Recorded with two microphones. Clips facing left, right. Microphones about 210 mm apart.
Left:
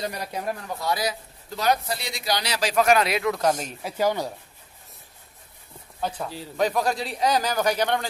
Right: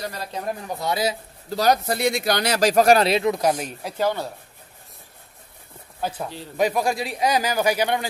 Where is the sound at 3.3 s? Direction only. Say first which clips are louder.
Right 2 dB; 10° right (ahead or behind).